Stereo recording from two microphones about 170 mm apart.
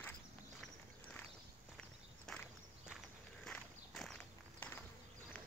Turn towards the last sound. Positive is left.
turn(degrees=10)  # may be behind; listen again after turning